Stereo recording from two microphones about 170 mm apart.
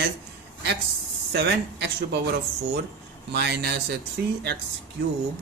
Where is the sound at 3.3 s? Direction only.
80° right.